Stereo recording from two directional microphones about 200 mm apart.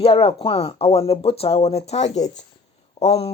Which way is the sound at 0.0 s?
30° left (ahead or behind).